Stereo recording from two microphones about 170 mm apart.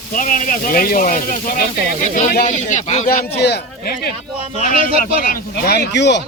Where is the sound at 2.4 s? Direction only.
45° left (ahead or behind).